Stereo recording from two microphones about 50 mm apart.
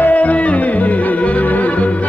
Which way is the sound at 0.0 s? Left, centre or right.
Left.